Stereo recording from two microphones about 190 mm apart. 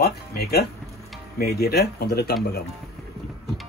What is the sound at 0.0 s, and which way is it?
A man's voice, 55° left (ahead or behind).